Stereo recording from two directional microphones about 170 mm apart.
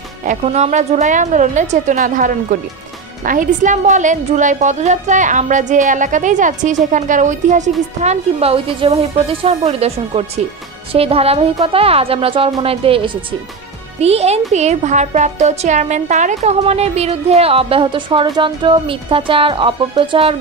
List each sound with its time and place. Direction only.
0.2 s a woman's voice: 45° right (ahead or behind)